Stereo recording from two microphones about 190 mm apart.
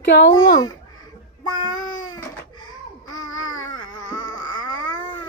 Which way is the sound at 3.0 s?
90° left.